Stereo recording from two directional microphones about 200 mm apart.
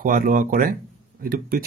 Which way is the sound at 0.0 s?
45° right (ahead or behind).